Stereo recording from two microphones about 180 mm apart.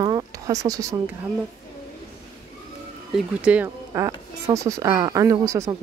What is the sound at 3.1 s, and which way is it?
Speech, 5° right (ahead or behind).